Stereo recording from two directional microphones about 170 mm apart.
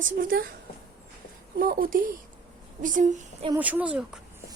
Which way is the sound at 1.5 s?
55° right (ahead or behind).